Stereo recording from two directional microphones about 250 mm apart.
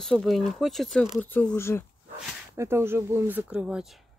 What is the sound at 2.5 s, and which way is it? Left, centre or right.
Speech, centre.